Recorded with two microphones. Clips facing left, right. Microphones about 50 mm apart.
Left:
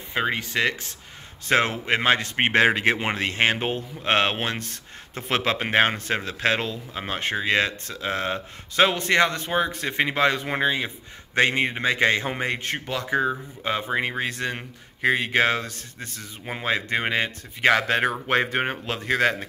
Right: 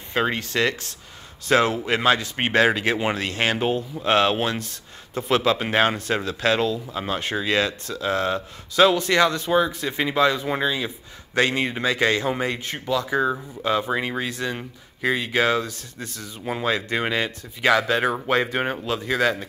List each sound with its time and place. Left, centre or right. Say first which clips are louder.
0.1 s speech: right 2 dB; centre
1.5 s speech: right 2 dB; left